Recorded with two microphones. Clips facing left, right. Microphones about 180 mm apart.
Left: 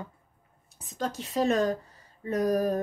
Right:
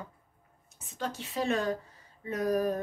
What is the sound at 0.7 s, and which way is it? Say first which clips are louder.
Speech: left 4 dB; 35° left (ahead or behind).